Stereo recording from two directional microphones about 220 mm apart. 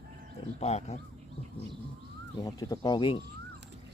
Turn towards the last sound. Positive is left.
turn(degrees=20)  # may be behind; listen again after turning